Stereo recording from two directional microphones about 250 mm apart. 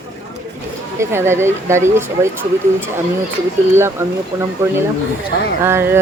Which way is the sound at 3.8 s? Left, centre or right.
Centre.